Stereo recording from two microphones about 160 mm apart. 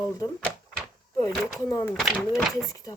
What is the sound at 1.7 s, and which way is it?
Speech, 15° left (ahead or behind).